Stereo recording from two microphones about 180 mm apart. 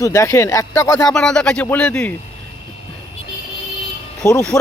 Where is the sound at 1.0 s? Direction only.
5° left (ahead or behind).